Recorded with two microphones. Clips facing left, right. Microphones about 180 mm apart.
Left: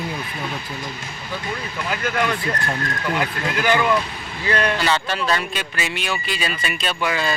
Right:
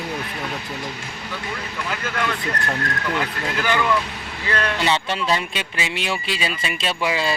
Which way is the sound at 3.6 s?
15° left (ahead or behind).